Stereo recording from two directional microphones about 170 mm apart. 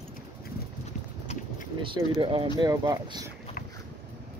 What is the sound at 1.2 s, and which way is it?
Vehicle, 40° left (ahead or behind).